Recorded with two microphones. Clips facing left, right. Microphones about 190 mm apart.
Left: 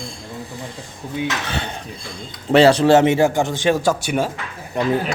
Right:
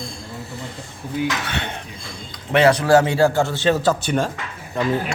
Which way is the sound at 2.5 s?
30° left (ahead or behind).